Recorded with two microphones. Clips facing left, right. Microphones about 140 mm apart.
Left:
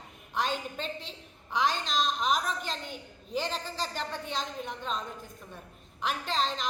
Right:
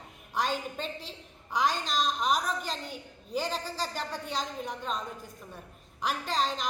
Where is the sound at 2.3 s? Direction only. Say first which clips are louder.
Right 1 dB; 5° right (ahead or behind).